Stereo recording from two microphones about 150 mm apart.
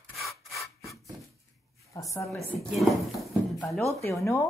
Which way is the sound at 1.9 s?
20° left (ahead or behind).